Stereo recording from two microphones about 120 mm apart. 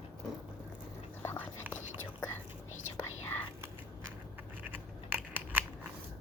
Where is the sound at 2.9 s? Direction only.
15° left (ahead or behind).